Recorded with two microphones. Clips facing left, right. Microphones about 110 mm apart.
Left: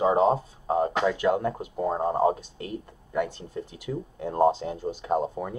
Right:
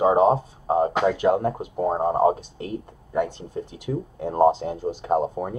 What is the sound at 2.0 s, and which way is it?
Speech, 20° right (ahead or behind).